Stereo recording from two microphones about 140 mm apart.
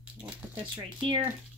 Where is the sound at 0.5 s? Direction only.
35° right (ahead or behind).